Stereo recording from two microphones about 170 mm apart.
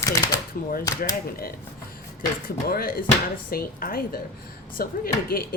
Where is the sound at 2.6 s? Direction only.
60° left (ahead or behind).